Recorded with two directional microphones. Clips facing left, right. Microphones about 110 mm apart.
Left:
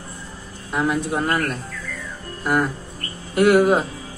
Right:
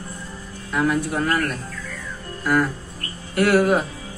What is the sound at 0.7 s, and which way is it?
A woman's voice, 20° left (ahead or behind).